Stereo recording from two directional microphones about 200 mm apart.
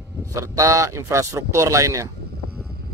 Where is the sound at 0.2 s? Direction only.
15° right (ahead or behind).